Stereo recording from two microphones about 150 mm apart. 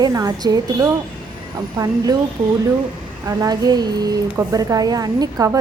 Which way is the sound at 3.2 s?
25° right (ahead or behind).